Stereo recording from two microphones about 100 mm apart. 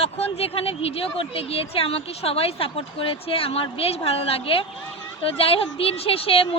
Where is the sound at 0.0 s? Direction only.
80° left.